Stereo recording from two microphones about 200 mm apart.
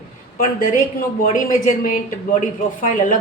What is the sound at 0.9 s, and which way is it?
A woman's voice, 40° left (ahead or behind).